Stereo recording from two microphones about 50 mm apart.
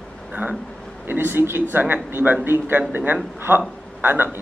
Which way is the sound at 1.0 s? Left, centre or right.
Right.